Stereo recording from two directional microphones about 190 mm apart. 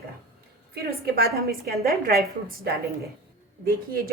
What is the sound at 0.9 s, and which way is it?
A woman's voice, 55° right (ahead or behind).